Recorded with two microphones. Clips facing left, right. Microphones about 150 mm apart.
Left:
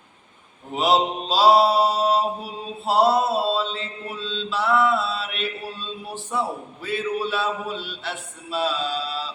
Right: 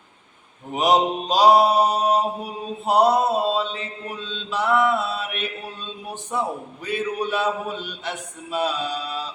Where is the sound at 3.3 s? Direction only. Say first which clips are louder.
Right 1 dB; 15° right (ahead or behind).